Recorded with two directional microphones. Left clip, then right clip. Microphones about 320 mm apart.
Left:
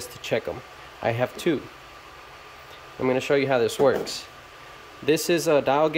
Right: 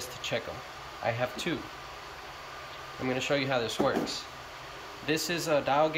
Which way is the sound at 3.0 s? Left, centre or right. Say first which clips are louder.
Left 8 dB; centre.